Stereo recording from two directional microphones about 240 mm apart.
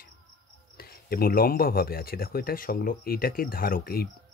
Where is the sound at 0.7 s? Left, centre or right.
Left.